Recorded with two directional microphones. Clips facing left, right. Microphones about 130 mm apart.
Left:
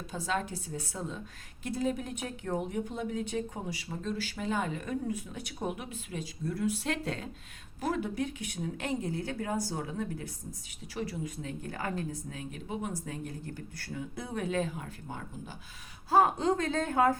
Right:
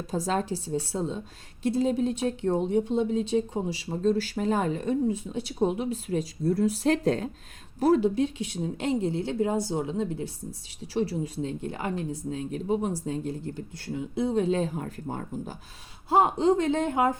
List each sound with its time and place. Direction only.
0.1 s a woman's voice: 40° right (ahead or behind)
16.0 s speech: 25° right (ahead or behind)